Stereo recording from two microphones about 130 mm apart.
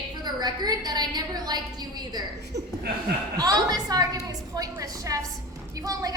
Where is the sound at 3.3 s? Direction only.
30° right (ahead or behind).